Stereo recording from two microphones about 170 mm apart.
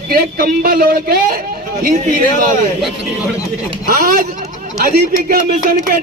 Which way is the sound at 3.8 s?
60° right (ahead or behind).